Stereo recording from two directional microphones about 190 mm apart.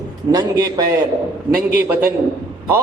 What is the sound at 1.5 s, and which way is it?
Speech, 55° right (ahead or behind).